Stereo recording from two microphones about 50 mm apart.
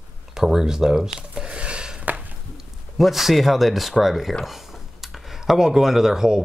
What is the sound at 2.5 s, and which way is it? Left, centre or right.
Speech, centre.